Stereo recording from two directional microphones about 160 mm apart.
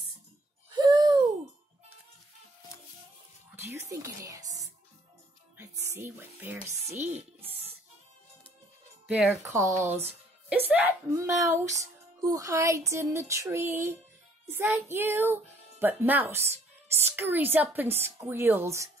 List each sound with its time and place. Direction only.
0.7 s a sound: 25° right (ahead or behind)
3.5 s speech: 15° right (ahead or behind)
5.6 s speech: 15° right (ahead or behind)
9.0 s speech: 5° right (ahead or behind)
9.5 s speech: 20° right (ahead or behind)